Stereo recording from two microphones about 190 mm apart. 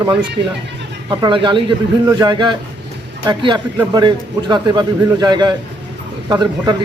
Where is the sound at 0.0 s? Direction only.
25° right (ahead or behind).